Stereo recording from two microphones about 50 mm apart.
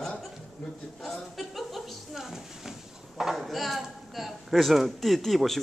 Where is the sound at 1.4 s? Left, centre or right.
Centre.